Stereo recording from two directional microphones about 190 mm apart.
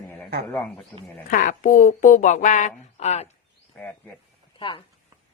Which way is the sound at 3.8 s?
10° left (ahead or behind).